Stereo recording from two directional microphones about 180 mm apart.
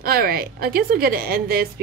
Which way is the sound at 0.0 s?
55° right (ahead or behind).